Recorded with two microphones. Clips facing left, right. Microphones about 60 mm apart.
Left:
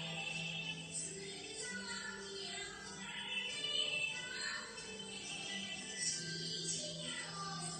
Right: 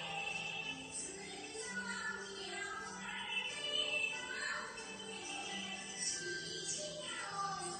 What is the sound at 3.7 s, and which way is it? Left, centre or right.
Music, right.